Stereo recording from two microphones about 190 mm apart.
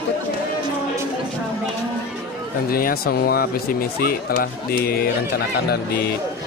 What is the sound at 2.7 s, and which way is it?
Speech, 50° left (ahead or behind).